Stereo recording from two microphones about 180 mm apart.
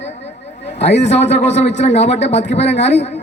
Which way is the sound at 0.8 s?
35° left (ahead or behind).